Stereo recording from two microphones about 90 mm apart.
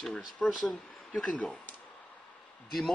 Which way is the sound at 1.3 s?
15° left (ahead or behind).